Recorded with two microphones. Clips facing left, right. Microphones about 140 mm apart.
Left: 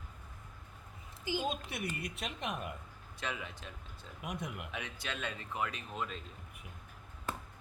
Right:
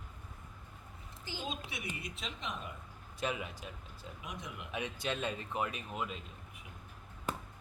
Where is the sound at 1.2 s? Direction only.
15° left (ahead or behind).